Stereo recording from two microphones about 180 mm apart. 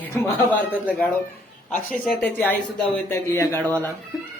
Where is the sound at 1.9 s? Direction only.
5° left (ahead or behind).